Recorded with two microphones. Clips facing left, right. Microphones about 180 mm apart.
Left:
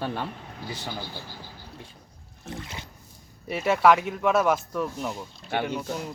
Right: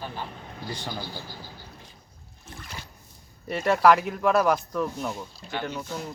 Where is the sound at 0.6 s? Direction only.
5° left (ahead or behind).